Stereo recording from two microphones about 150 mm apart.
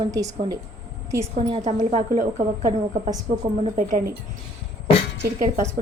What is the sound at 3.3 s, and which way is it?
Speech, 75° right (ahead or behind).